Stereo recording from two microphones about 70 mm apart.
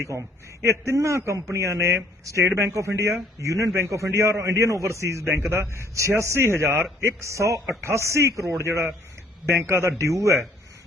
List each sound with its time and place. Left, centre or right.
0.0 s a man's voice: right
2.5 s a man's voice: right